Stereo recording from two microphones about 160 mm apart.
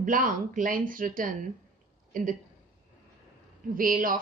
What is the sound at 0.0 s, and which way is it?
Speech, 55° right (ahead or behind).